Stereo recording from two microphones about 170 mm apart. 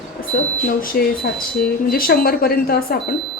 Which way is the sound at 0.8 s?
60° left (ahead or behind).